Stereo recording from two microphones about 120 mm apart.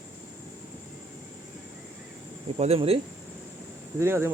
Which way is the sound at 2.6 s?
55° right (ahead or behind).